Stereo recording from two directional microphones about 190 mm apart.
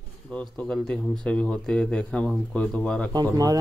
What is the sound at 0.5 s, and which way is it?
Speech, 5° left (ahead or behind).